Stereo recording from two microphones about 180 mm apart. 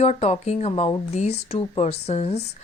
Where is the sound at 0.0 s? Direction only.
35° left (ahead or behind).